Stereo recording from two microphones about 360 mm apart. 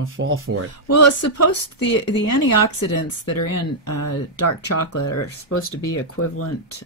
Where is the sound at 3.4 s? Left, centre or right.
Left.